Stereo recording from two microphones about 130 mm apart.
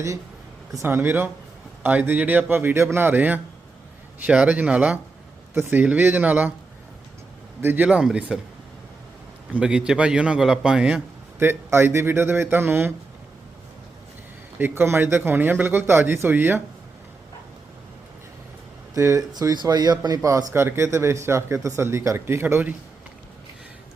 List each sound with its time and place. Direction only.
0.7 s speech: 20° right (ahead or behind)
7.6 s speech: 15° right (ahead or behind)
9.6 s speech: 5° right (ahead or behind)
11.3 s speech: 20° right (ahead or behind)
14.6 s speech: 15° right (ahead or behind)
18.9 s speech: 25° right (ahead or behind)